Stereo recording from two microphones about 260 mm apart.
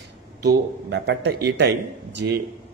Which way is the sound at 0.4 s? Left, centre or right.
Right.